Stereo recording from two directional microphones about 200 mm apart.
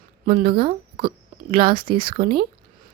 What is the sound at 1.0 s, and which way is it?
A woman's voice, 50° right (ahead or behind).